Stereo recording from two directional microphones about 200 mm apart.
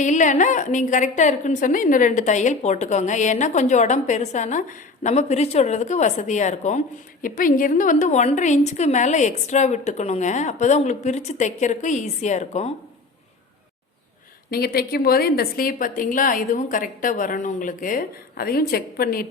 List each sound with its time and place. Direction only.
0.0 s a woman's voice: 40° left (ahead or behind)
14.5 s a woman's voice: 50° left (ahead or behind)